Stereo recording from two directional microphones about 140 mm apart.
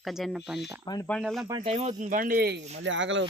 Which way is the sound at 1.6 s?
50° right (ahead or behind).